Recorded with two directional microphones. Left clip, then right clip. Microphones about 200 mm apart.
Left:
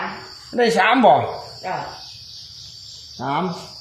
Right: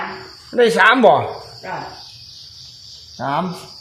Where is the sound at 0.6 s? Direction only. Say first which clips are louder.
Right 4 dB; 25° right (ahead or behind).